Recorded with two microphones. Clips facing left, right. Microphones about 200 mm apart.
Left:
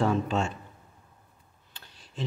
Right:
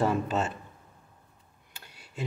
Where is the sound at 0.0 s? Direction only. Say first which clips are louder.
Left 1 dB; 5° right (ahead or behind).